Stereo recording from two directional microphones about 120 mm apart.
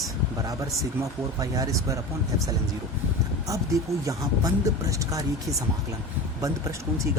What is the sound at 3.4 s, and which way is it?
Speech, 25° right (ahead or behind).